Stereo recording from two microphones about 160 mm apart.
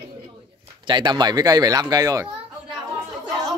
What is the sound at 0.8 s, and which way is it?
Speech, 30° right (ahead or behind).